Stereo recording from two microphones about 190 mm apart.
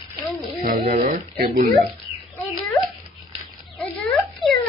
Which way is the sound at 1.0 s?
50° right (ahead or behind).